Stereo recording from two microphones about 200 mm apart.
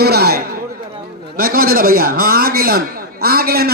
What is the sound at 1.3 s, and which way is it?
A man's voice, 45° right (ahead or behind).